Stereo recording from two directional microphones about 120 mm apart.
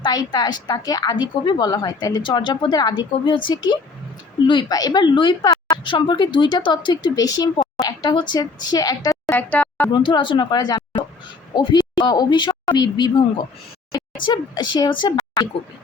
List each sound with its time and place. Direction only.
0.0 s speech: 35° left (ahead or behind)
9.3 s speech: 15° left (ahead or behind)
9.9 s speech: 40° left (ahead or behind)
14.3 s speech: 40° left (ahead or behind)